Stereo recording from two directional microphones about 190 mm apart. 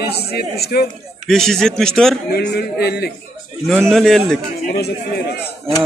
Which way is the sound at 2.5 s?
55° left (ahead or behind).